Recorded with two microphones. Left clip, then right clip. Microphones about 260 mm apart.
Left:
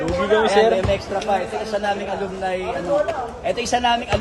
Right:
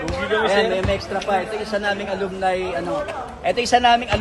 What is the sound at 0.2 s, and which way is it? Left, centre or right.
Speech, left.